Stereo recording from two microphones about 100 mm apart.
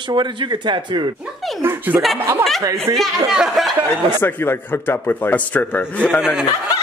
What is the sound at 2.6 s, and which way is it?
Speech, 35° right (ahead or behind).